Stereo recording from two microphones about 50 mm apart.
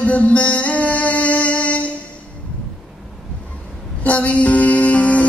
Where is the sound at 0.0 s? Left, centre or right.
Left.